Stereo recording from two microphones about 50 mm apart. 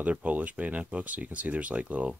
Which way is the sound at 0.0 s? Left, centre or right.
Right.